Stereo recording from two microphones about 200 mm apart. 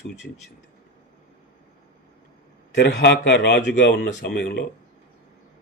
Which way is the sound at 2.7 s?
55° left (ahead or behind).